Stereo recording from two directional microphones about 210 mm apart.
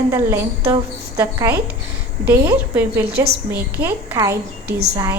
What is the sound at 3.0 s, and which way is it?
Speech, 50° right (ahead or behind).